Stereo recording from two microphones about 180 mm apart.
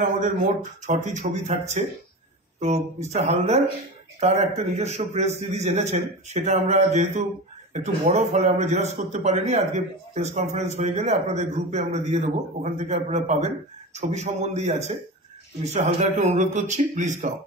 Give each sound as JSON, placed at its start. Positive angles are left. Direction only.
{"t": 0.0, "sound": "a man's voice", "side_deg": -45}